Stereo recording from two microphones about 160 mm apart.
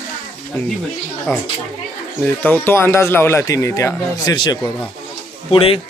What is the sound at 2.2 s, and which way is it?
Speech, 10° left (ahead or behind).